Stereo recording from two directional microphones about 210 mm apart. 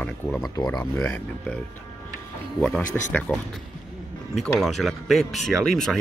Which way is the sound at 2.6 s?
5° left (ahead or behind).